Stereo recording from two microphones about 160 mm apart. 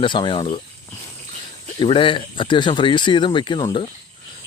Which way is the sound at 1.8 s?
30° left (ahead or behind).